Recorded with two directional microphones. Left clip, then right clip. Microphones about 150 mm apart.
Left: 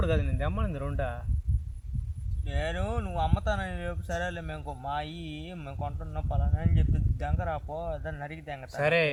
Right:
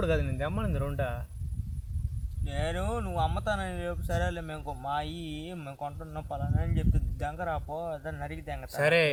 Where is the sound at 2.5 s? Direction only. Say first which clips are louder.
Even; 10° left (ahead or behind).